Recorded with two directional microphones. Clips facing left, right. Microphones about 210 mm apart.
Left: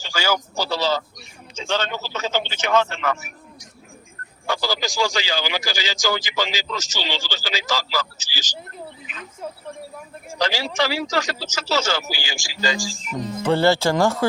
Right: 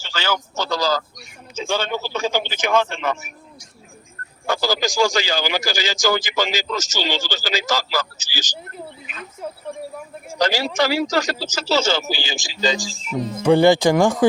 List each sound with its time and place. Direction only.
0.0 s a man's voice: 10° left (ahead or behind)
1.5 s speech: 10° right (ahead or behind)
4.4 s a man's voice: 45° right (ahead or behind)
10.2 s speech: 40° right (ahead or behind); by 14.3 s 15° right (ahead or behind)